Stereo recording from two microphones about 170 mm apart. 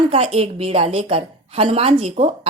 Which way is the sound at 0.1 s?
35° right (ahead or behind).